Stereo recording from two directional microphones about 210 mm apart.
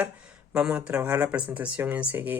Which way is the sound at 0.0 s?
5° right (ahead or behind).